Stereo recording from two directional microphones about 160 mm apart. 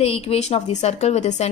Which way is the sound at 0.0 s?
40° left (ahead or behind).